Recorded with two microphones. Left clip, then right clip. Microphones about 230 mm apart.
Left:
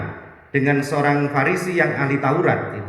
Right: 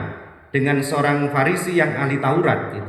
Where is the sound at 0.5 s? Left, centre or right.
Right.